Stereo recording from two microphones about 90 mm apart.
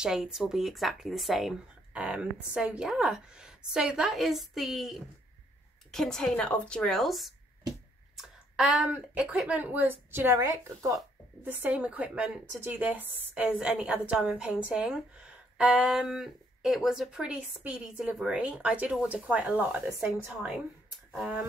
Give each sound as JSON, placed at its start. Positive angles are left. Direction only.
{"t": 0.0, "sound": "speech", "side_deg": -5}
{"t": 8.2, "sound": "a sound", "side_deg": -5}
{"t": 8.9, "sound": "a woman's voice", "side_deg": -10}
{"t": 10.4, "sound": "a woman's voice", "side_deg": -40}
{"t": 11.4, "sound": "a woman's voice", "side_deg": -20}
{"t": 12.5, "sound": "a woman's voice", "side_deg": -25}